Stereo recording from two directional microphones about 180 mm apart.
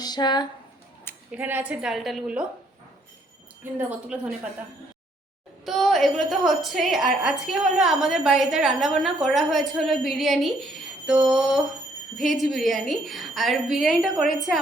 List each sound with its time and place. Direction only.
0.0 s speech: 25° left (ahead or behind)
1.3 s a woman's voice: 10° right (ahead or behind)
3.6 s a woman's voice: 10° right (ahead or behind)
5.6 s a woman's voice: centre (ahead or behind)